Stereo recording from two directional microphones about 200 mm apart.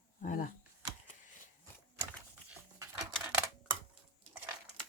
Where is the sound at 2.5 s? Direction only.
15° right (ahead or behind).